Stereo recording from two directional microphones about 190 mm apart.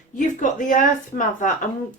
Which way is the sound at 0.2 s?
40° left (ahead or behind).